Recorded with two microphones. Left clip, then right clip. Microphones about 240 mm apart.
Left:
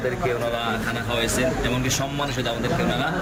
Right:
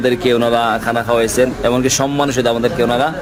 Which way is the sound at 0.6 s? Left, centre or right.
Centre.